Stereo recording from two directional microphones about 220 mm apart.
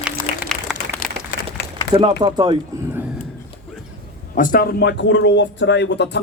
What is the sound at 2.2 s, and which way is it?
Speech, 20° right (ahead or behind).